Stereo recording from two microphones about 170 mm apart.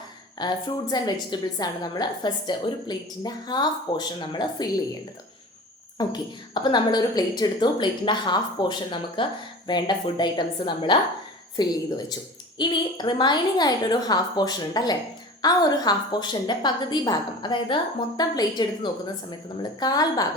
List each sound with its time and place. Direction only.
0.3 s a woman's voice: 25° left (ahead or behind)
6.0 s a woman's voice: 25° left (ahead or behind)